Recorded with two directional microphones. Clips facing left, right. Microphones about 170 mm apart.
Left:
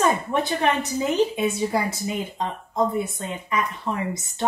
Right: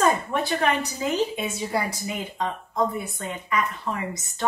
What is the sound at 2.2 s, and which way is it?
Speech, 25° left (ahead or behind).